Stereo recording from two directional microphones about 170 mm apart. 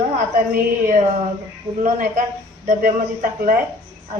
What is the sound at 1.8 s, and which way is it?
A woman's voice, 50° right (ahead or behind).